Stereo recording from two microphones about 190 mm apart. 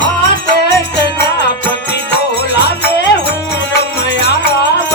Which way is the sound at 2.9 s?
65° left (ahead or behind).